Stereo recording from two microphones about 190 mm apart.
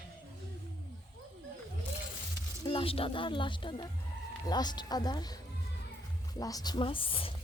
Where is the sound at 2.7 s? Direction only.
30° left (ahead or behind).